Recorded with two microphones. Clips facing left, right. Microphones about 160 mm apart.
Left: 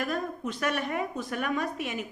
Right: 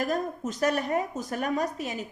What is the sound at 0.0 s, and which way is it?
A woman's voice, 40° right (ahead or behind).